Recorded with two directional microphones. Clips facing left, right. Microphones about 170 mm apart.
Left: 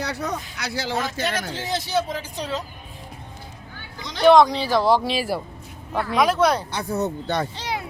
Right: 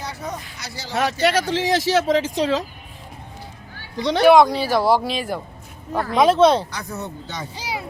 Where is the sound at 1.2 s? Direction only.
85° right.